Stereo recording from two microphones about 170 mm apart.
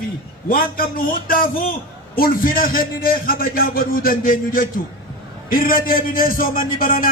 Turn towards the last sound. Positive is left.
turn(degrees=55)  # may be behind; listen again after turning